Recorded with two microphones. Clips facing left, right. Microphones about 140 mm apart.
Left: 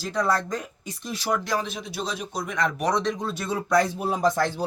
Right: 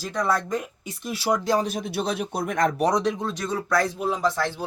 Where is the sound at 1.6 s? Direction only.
50° right (ahead or behind).